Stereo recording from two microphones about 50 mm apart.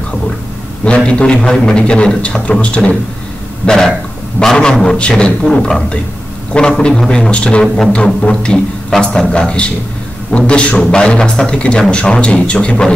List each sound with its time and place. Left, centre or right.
0.8 s a man's voice: left
3.6 s a man's voice: centre
6.8 s a man's voice: centre